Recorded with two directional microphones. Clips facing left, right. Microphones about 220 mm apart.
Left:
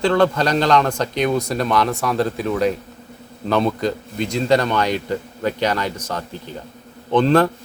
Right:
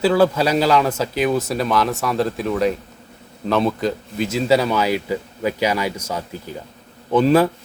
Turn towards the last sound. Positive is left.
turn(degrees=-5)  # may be behind; listen again after turning